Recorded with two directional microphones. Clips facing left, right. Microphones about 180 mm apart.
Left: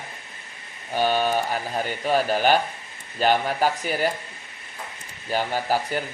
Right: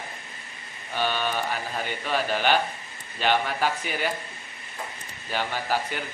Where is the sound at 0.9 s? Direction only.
40° left (ahead or behind).